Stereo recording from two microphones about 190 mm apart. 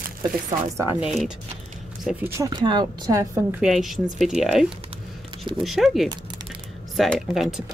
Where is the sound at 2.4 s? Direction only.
25° right (ahead or behind).